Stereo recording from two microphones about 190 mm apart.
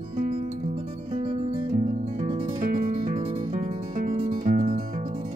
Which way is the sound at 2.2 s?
35° right (ahead or behind).